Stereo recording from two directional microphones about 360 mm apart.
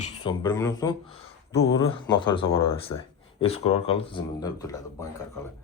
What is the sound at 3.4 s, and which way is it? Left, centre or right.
Speech, centre.